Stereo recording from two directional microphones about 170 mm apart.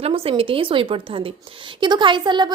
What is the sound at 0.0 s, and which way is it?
Speech, 35° right (ahead or behind).